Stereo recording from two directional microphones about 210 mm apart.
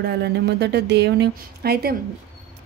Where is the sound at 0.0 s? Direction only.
55° right (ahead or behind).